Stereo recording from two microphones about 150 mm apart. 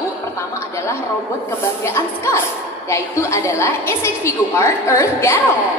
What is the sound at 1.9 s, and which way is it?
A woman's voice, 15° left (ahead or behind).